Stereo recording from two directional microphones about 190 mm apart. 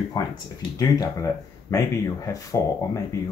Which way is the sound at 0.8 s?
20° left (ahead or behind).